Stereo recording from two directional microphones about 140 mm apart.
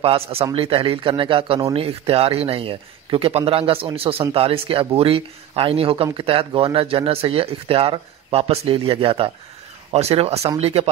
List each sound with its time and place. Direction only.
0.0 s speech: 45° right (ahead or behind)